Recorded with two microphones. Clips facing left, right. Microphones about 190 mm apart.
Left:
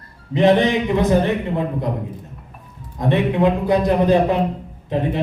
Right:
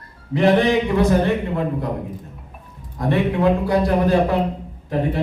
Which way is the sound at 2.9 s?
20° left (ahead or behind).